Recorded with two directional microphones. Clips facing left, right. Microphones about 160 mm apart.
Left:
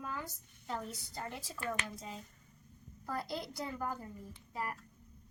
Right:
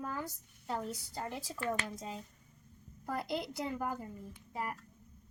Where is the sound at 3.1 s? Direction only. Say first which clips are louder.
Right 3 dB; 20° right (ahead or behind).